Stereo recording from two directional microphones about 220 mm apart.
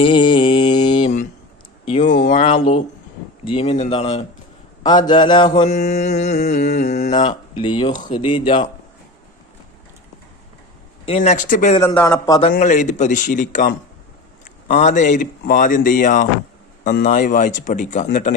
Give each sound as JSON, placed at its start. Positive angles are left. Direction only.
{"t": 0.0, "sound": "mantra", "side_deg": 20}
{"t": 2.0, "sound": "a sound", "side_deg": 50}
{"t": 2.3, "sound": "a sound", "side_deg": 25}
{"t": 3.4, "sound": "speech", "side_deg": 25}
{"t": 5.5, "sound": "speech", "side_deg": 30}
{"t": 11.0, "sound": "speech", "side_deg": 30}
{"t": 11.8, "sound": "speech", "side_deg": 15}
{"t": 12.4, "sound": "speech", "side_deg": 35}